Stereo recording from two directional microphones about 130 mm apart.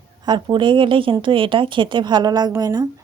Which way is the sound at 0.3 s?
35° right (ahead or behind).